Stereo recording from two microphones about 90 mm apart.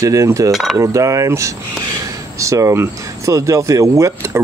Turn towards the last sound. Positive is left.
turn(degrees=-35)  # may be behind; listen again after turning